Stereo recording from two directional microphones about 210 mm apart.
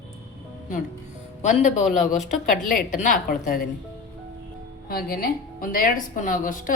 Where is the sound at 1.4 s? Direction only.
35° left (ahead or behind).